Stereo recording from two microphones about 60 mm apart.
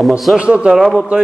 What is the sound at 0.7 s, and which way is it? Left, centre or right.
Speech, centre.